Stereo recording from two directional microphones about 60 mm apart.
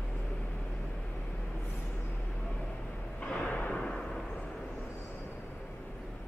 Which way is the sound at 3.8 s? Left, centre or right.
Centre.